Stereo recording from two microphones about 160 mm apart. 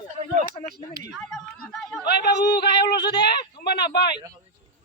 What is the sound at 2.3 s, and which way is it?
Speech, 90° left.